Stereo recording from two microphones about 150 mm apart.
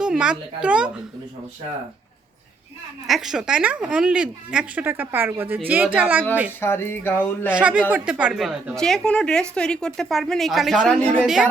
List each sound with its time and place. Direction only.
0.0 s a woman's voice: 5° right (ahead or behind)
3.1 s a woman's voice: 5° right (ahead or behind)
6.6 s speech: 15° left (ahead or behind)
7.5 s a woman's voice: 10° right (ahead or behind)